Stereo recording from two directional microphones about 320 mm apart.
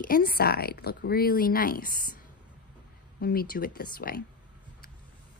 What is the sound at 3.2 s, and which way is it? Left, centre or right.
Speech, left.